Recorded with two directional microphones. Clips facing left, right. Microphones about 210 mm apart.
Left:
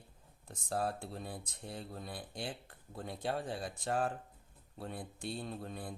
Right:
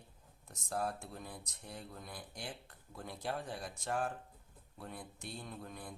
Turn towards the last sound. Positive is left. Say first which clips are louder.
# left 5 dB
turn(degrees=30)  # may be behind; listen again after turning